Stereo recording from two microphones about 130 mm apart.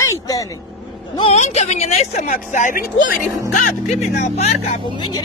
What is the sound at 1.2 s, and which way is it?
Speech, 55° left (ahead or behind).